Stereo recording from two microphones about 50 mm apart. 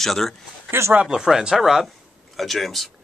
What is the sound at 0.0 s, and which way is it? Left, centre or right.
Speech, centre.